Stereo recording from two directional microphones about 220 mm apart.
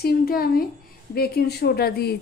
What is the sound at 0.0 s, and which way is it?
A woman's voice, 45° left (ahead or behind).